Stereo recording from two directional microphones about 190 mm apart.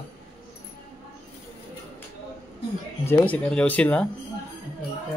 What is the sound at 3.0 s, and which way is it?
Speech, 5° left (ahead or behind).